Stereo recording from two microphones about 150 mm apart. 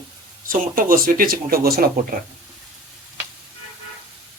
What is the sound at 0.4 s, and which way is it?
Speech, 70° right (ahead or behind).